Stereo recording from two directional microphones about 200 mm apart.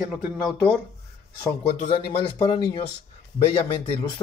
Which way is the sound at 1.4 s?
25° left (ahead or behind).